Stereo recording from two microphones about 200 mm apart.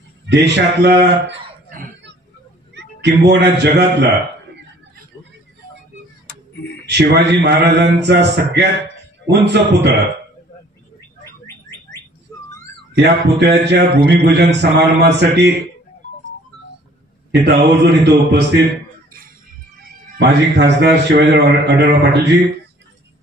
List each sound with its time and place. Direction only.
0.3 s a man's voice: 60° right (ahead or behind)
6.5 s a sound: 60° left (ahead or behind)
6.9 s a man's voice: 60° right (ahead or behind)
11.2 s bird: 15° left (ahead or behind)
12.3 s whistling: 15° left (ahead or behind)
12.9 s a man's voice: 55° right (ahead or behind)
17.5 s a man's voice: 55° right (ahead or behind)
20.2 s a man's voice: 55° right (ahead or behind)